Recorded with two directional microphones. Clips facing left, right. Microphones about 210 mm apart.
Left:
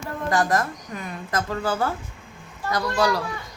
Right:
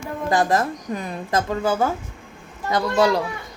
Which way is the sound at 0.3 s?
25° right (ahead or behind).